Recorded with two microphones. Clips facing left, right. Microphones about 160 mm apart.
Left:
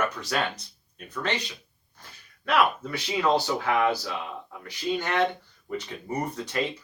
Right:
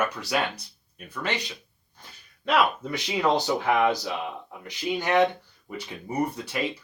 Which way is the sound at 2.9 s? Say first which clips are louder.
Right 1 dB; 20° right (ahead or behind).